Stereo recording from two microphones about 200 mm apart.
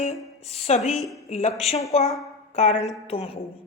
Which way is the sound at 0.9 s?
Centre (ahead or behind).